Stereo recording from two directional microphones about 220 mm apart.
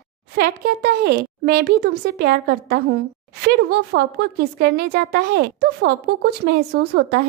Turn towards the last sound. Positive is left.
turn(degrees=-45)  # may be behind; listen again after turning